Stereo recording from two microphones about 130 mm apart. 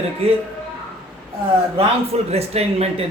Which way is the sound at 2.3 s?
50° right (ahead or behind).